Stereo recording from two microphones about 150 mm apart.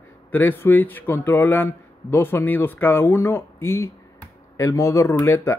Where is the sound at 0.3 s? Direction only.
10° left (ahead or behind).